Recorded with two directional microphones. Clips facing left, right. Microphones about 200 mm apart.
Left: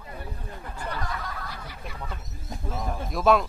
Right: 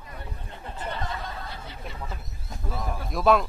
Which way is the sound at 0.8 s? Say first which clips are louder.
Right 1 dB; 25° right (ahead or behind).